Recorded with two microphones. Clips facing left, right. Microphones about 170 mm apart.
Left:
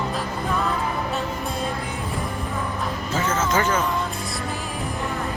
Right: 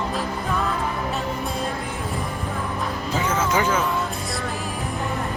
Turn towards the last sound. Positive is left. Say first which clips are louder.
# even
turn(degrees=-10)  # may be behind; listen again after turning